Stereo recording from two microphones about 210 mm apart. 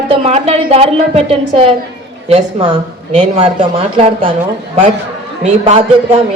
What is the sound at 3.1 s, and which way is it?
A woman's voice, 25° right (ahead or behind).